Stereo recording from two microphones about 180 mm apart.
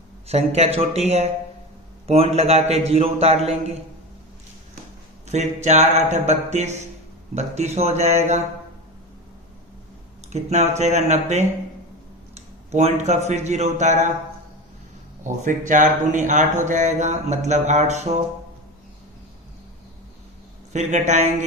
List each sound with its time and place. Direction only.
0.3 s speech: 35° right (ahead or behind)
5.3 s speech: 40° right (ahead or behind)
10.3 s a man's voice: 40° right (ahead or behind)
15.2 s speech: 45° right (ahead or behind)
20.7 s speech: 40° right (ahead or behind)